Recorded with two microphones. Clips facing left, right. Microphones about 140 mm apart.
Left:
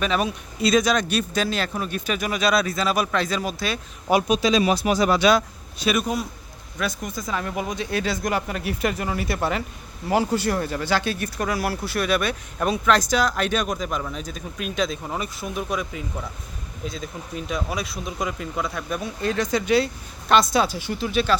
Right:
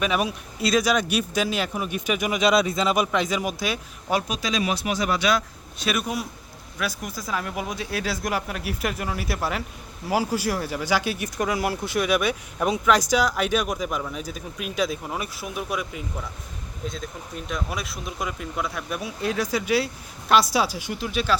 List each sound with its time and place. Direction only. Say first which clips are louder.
0.0 s speech: left 1 dB; 10° right (ahead or behind)
4.1 s speech: left 6 dB; 25° left (ahead or behind)
5.8 s speech: left 3 dB; centre (ahead or behind)